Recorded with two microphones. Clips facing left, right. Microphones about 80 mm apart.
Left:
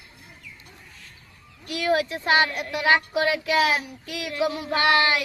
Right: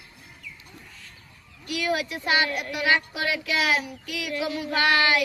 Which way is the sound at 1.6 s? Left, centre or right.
Left.